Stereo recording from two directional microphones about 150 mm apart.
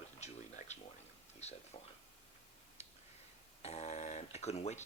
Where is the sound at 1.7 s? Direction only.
35° left (ahead or behind).